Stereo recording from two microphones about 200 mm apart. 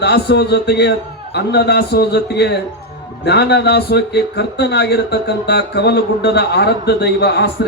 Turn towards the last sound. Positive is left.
turn(degrees=55)  # may be behind; listen again after turning